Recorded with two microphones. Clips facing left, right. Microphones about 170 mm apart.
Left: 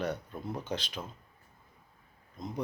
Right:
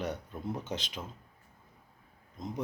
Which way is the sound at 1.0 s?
5° right (ahead or behind).